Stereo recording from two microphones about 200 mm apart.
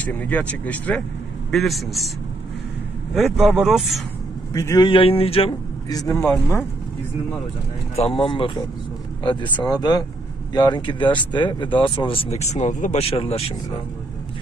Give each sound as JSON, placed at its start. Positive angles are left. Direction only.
{"t": 0.0, "sound": "speech", "side_deg": 10}
{"t": 3.2, "sound": "speech", "side_deg": 0}
{"t": 4.6, "sound": "speech", "side_deg": 20}
{"t": 7.9, "sound": "speech", "side_deg": 30}